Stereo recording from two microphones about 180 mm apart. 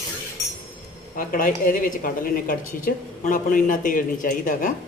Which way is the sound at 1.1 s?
50° left (ahead or behind).